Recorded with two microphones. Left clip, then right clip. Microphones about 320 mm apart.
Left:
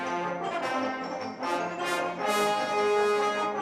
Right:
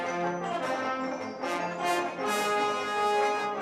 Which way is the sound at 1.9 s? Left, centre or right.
Left.